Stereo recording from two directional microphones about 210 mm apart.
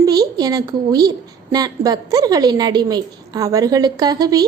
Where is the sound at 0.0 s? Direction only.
20° right (ahead or behind).